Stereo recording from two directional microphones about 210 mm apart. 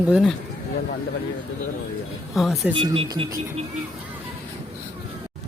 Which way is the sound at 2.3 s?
Centre (ahead or behind).